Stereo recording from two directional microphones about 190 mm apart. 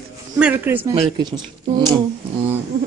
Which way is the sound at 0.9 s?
30° right (ahead or behind).